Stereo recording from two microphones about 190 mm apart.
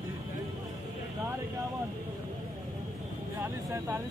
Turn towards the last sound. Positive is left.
turn(degrees=-15)  # may be behind; listen again after turning